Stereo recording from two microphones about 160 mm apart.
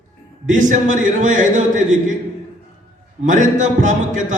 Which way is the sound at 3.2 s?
50° right (ahead or behind).